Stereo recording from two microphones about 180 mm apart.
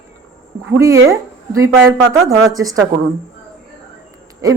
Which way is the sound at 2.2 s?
20° right (ahead or behind).